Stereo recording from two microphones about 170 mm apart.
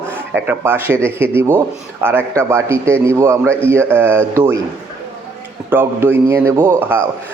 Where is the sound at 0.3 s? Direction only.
10° right (ahead or behind).